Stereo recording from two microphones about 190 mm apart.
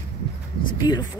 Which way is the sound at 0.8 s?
20° left (ahead or behind).